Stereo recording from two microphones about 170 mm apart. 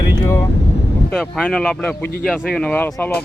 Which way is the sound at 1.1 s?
Centre (ahead or behind).